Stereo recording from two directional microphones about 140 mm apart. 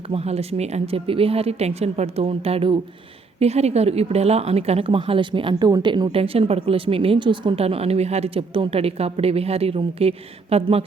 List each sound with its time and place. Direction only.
0.1 s speech: 45° right (ahead or behind)